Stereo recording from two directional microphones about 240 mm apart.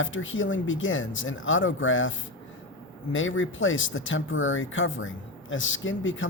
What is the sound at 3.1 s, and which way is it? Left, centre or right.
Speech, left.